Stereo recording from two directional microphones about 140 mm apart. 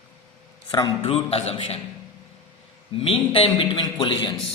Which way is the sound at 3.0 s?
40° left (ahead or behind).